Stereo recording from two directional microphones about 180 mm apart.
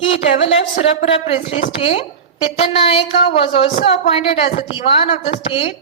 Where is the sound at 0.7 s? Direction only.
35° left (ahead or behind).